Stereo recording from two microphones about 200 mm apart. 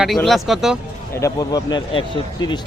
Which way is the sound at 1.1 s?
15° left (ahead or behind).